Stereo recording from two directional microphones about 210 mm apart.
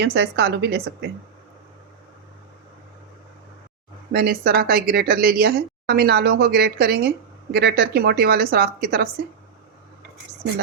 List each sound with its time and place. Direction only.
0.0 s speech: 50° right (ahead or behind)
4.1 s speech: 45° right (ahead or behind)